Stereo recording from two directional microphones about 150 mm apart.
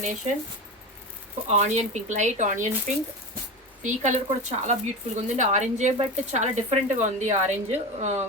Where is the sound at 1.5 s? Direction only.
50° right (ahead or behind).